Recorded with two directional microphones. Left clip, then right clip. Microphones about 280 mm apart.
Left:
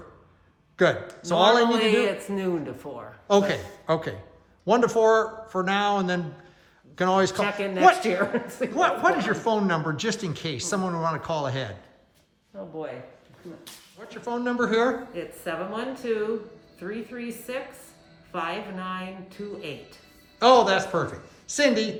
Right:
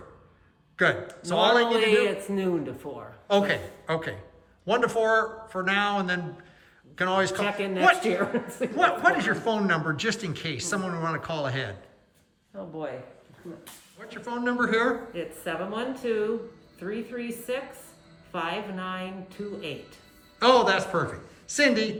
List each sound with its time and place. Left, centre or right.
0.8 s a woman's voice: centre
1.8 s speech: centre
3.2 s a woman's voice: centre
7.4 s a woman's voice: centre
12.5 s speech: centre
14.1 s a woman's voice: centre